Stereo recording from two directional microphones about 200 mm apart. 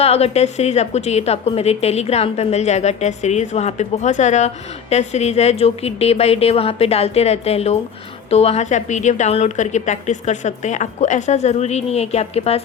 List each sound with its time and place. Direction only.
0.0 s a woman's voice: 30° left (ahead or behind)